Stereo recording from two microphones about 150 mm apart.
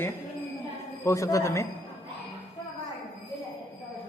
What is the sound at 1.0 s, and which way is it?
Speech, 20° left (ahead or behind).